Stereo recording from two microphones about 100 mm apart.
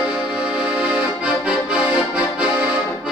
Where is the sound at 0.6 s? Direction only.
10° right (ahead or behind).